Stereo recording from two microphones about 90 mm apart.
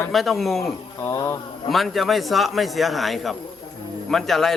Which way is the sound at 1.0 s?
30° left (ahead or behind).